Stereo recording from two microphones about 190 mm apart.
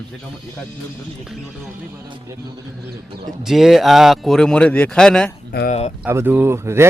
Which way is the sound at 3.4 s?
Centre (ahead or behind).